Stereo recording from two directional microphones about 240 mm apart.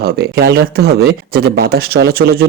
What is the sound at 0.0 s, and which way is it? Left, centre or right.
Speech, right.